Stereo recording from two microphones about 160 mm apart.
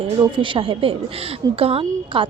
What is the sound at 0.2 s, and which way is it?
Speech, 30° right (ahead or behind).